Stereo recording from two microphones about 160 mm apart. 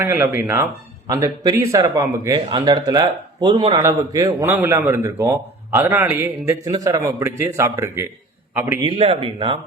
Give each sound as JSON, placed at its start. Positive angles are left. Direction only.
{"t": 0.0, "sound": "a man's voice", "side_deg": -15}
{"t": 8.9, "sound": "speech", "side_deg": -35}